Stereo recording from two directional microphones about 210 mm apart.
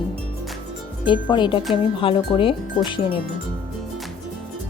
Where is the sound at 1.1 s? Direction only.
20° left (ahead or behind).